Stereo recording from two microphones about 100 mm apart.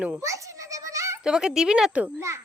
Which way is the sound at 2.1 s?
25° right (ahead or behind).